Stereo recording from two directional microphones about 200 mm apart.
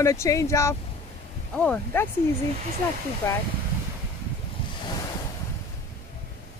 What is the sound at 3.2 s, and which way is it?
Speech, 10° left (ahead or behind).